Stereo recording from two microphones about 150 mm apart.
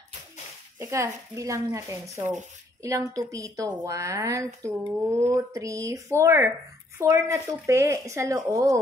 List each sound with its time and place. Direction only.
0.7 s speech: 20° right (ahead or behind)